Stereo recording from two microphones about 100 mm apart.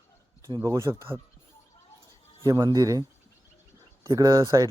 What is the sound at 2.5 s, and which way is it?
Speech, 40° right (ahead or behind).